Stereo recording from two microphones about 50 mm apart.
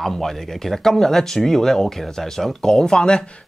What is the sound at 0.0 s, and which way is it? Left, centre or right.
Speech, centre.